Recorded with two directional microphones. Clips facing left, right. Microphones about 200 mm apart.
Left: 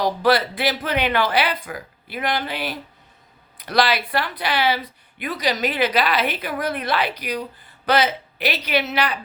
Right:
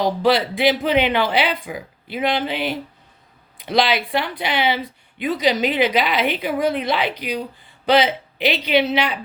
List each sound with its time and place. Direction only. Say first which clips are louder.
0.0 s speech: right 1 dB; 20° right (ahead or behind)
8.4 s speech: right 5 dB; 20° right (ahead or behind)